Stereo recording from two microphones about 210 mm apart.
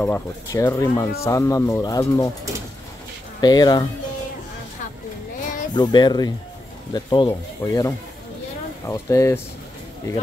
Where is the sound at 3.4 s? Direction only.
20° left (ahead or behind).